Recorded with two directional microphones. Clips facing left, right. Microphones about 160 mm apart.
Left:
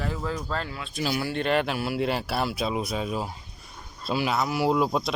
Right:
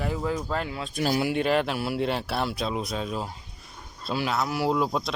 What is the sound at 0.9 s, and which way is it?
Speech, 50° right (ahead or behind).